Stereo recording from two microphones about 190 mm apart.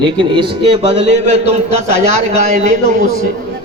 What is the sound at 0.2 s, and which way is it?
A man's voice, 25° right (ahead or behind).